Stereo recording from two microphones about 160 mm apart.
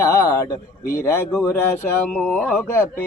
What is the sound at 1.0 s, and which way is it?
Mantra, 15° left (ahead or behind).